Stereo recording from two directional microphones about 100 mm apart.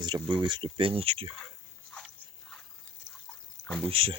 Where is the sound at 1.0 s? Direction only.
75° right (ahead or behind).